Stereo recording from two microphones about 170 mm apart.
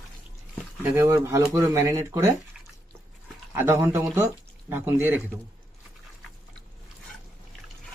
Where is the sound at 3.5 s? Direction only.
15° right (ahead or behind).